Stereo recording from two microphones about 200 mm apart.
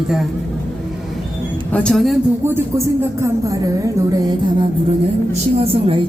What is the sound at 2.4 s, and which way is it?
Speech, 15° right (ahead or behind).